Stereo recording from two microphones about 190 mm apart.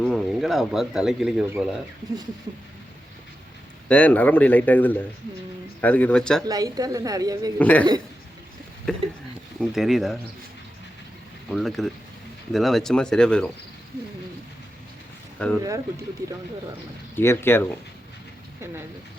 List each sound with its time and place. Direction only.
0.0 s speech: centre (ahead or behind)
3.8 s speech: 5° left (ahead or behind)
6.4 s a woman's voice: 20° right (ahead or behind)
7.6 s speech: 10° left (ahead or behind)
8.9 s speech: centre (ahead or behind)
11.4 s speech: centre (ahead or behind)
15.4 s speech: 5° left (ahead or behind)
17.2 s speech: 10° left (ahead or behind)